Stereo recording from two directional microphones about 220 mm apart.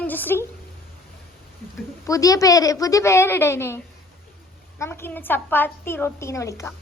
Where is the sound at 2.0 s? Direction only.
15° left (ahead or behind).